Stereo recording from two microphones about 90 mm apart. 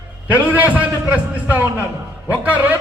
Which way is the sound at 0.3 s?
20° right (ahead or behind).